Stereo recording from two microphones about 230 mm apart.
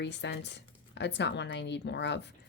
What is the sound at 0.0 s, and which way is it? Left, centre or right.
A woman's voice, left.